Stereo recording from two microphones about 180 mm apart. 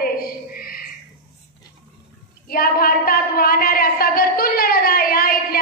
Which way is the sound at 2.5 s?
55° left (ahead or behind).